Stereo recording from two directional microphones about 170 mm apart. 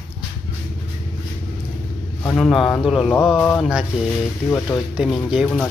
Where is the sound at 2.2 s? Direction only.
5° left (ahead or behind).